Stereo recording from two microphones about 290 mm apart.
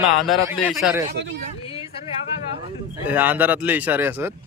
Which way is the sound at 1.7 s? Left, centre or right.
Centre.